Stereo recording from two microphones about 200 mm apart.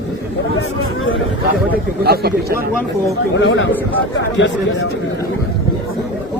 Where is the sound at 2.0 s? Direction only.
50° right (ahead or behind).